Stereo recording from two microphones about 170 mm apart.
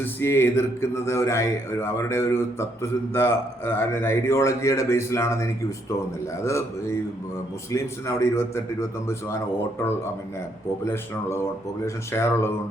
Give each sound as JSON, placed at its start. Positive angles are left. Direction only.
{"t": 0.0, "sound": "speech", "side_deg": 15}
{"t": 10.8, "sound": "speech", "side_deg": 15}